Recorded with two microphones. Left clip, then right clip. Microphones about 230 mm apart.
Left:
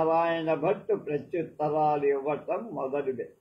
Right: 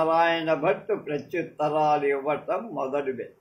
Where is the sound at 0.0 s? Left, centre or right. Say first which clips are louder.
Right 3 dB; right.